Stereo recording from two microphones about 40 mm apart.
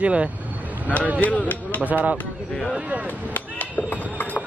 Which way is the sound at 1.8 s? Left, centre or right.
Right.